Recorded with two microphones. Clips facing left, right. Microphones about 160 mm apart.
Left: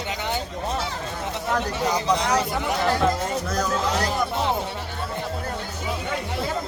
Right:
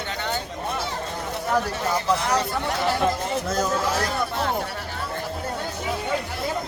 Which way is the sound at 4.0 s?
15° left (ahead or behind).